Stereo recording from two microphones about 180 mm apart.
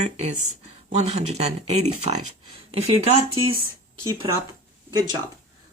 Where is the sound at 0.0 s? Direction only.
40° right (ahead or behind).